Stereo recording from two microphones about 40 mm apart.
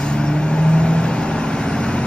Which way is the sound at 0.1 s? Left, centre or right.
Left.